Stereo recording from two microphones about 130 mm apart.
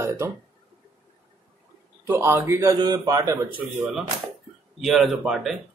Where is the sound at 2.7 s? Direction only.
30° right (ahead or behind).